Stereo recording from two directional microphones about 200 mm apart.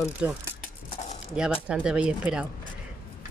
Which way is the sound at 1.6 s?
5° right (ahead or behind).